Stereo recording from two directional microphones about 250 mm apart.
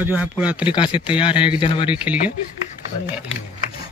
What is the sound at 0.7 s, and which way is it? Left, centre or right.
Speech, centre.